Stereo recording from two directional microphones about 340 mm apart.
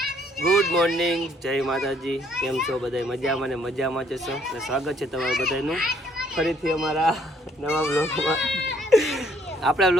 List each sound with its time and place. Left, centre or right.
0.0 s speech: centre